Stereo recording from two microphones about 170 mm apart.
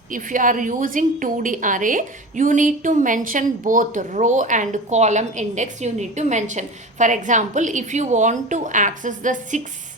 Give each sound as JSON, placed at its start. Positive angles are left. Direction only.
{"t": 0.1, "sound": "a woman's voice", "side_deg": -50}